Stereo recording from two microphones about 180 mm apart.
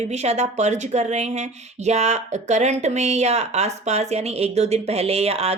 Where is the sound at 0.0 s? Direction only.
40° right (ahead or behind).